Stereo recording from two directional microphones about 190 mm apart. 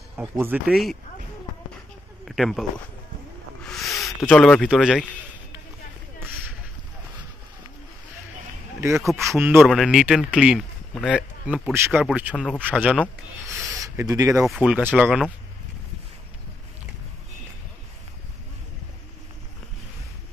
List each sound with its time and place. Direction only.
0.2 s speech: 10° right (ahead or behind)
2.2 s speech: centre (ahead or behind)
3.6 s a sound: centre (ahead or behind)
4.2 s a man's voice: 5° left (ahead or behind)
8.9 s a man's voice: centre (ahead or behind)
9.4 s a man's voice: 10° right (ahead or behind)
12.8 s a man's voice: 5° left (ahead or behind)
13.7 s speech: 15° right (ahead or behind)
14.4 s a man's voice: 5° right (ahead or behind)